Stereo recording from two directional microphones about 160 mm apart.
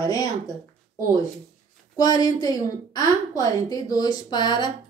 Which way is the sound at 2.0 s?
25° left (ahead or behind).